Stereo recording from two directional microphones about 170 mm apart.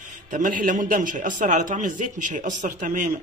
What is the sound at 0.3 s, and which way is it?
A man's voice, 50° right (ahead or behind).